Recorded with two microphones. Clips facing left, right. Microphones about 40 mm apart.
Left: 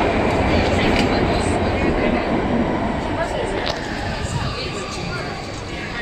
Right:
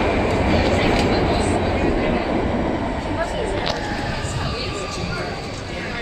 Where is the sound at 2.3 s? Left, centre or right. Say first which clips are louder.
Left 2 dB; centre.